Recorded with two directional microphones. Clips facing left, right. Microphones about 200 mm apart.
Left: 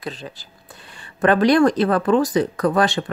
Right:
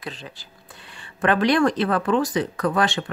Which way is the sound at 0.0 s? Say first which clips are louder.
Left 4 dB; 40° left (ahead or behind).